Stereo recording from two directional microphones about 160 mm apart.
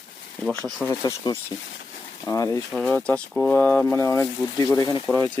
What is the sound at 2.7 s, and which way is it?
Speech, 5° left (ahead or behind).